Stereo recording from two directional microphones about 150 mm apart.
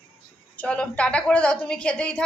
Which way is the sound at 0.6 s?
10° left (ahead or behind).